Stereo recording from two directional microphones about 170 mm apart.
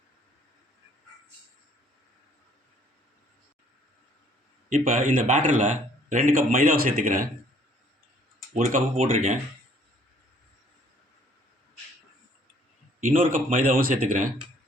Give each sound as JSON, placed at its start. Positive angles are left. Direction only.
{"t": 4.7, "sound": "speech", "side_deg": -50}
{"t": 8.5, "sound": "speech", "side_deg": -50}
{"t": 13.0, "sound": "speech", "side_deg": -55}